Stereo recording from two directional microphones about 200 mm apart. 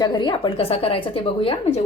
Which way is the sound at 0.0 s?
20° left (ahead or behind).